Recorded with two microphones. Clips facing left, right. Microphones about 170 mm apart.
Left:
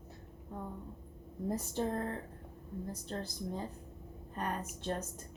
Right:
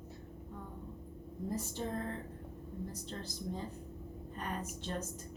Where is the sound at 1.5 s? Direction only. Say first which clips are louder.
Left 4 dB; 55° left (ahead or behind).